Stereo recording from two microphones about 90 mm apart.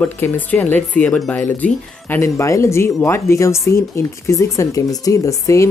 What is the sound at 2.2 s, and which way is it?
Speech, 35° left (ahead or behind).